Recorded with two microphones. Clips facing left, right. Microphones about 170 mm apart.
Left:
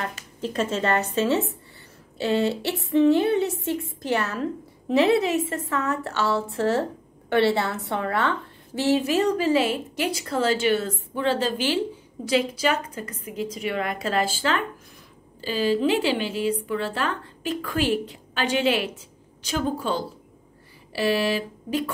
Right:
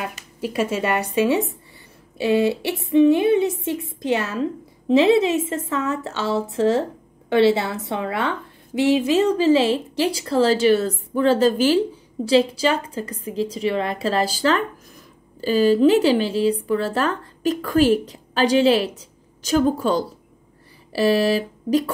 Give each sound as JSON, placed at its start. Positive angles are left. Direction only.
{"t": 0.4, "sound": "a woman's voice", "side_deg": -10}
{"t": 12.3, "sound": "a woman's voice", "side_deg": -30}